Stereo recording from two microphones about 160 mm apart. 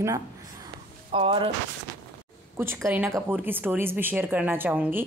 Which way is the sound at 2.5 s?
15° right (ahead or behind).